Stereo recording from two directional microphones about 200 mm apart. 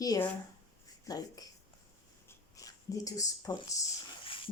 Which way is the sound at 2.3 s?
15° left (ahead or behind).